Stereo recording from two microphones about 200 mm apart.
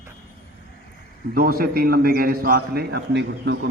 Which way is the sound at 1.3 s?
45° right (ahead or behind).